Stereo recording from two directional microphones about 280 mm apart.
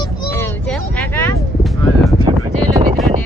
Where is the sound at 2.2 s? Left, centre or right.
Centre.